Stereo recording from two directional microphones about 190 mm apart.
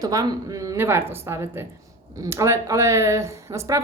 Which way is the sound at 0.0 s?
20° right (ahead or behind).